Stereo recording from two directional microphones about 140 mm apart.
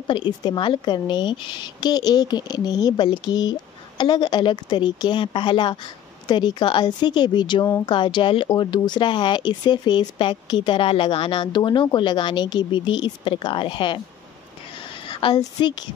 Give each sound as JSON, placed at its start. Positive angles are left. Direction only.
{"t": 0.1, "sound": "a woman's voice", "side_deg": 30}
{"t": 15.0, "sound": "a woman's voice", "side_deg": 35}